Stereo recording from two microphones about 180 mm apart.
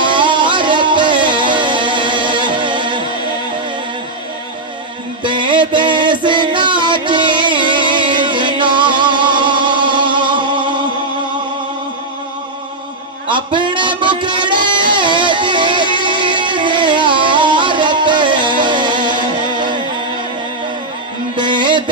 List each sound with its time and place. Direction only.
0.0 s music: 25° right (ahead or behind)
5.2 s music: 25° right (ahead or behind)
13.3 s a sound: 25° right (ahead or behind)
16.0 s music: 25° right (ahead or behind)
21.4 s music: 25° right (ahead or behind)